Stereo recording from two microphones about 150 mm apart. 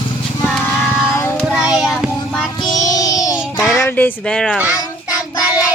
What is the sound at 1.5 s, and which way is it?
Child singing, 5° right (ahead or behind).